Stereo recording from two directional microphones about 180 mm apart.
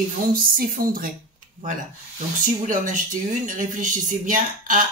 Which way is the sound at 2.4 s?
45° right (ahead or behind).